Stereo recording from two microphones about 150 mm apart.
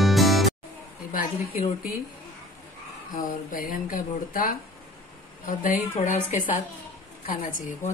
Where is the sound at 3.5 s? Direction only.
70° left (ahead or behind).